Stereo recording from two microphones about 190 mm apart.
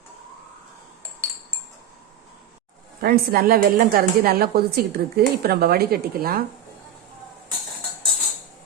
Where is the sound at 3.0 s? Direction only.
55° right (ahead or behind).